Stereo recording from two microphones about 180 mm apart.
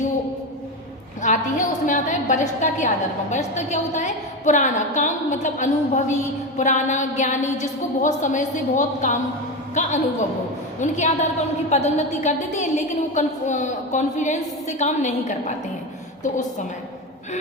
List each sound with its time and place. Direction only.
1.2 s a woman's voice: 45° left (ahead or behind)